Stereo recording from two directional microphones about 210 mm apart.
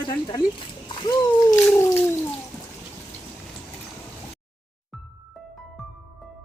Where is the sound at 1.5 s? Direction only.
10° left (ahead or behind).